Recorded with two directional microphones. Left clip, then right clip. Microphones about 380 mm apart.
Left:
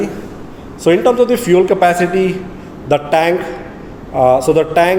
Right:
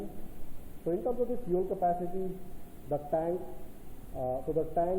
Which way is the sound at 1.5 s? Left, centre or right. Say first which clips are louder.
Left 19 dB; left.